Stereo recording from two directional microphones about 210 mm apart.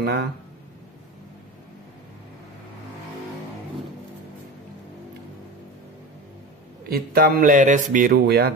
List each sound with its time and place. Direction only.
0.0 s speech: 50° right (ahead or behind)
6.9 s speech: 45° right (ahead or behind)